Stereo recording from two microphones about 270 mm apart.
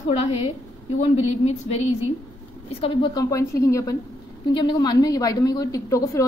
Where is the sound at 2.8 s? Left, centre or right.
Centre.